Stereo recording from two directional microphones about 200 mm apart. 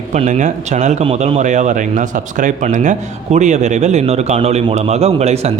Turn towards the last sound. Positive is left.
turn(degrees=-35)  # may be behind; listen again after turning